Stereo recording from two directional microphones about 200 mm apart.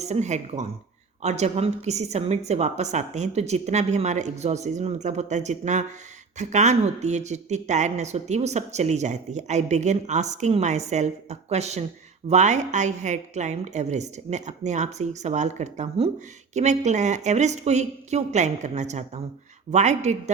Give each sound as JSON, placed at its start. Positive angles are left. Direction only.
{"t": 0.0, "sound": "a woman's voice", "side_deg": -35}